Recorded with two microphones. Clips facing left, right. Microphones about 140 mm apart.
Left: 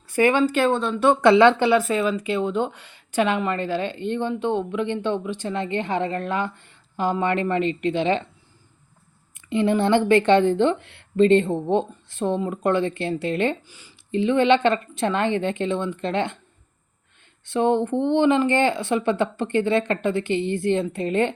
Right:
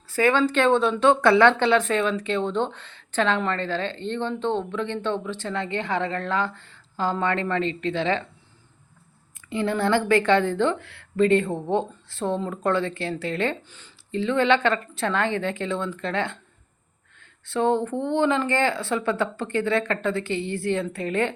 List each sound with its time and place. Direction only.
0.1 s speech: 15° left (ahead or behind)
9.5 s speech: 20° left (ahead or behind)
17.4 s speech: 20° left (ahead or behind)